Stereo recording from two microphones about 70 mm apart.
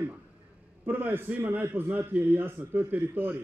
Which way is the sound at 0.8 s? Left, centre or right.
Right.